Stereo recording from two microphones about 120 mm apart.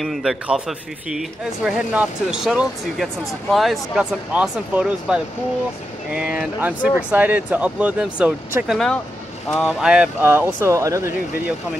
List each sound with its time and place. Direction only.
0.0 s speech: centre (ahead or behind)
8.7 s speech: 5° left (ahead or behind)
10.2 s speech: 20° right (ahead or behind)